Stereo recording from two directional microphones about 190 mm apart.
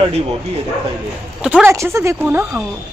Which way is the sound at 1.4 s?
10° right (ahead or behind).